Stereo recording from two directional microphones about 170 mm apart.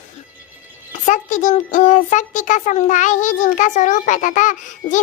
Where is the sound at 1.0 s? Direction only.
45° left (ahead or behind).